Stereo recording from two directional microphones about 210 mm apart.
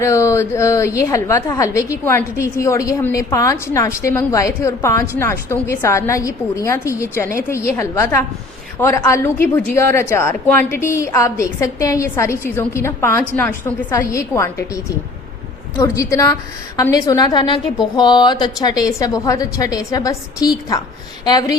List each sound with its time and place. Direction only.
0.0 s a woman's voice: 15° left (ahead or behind)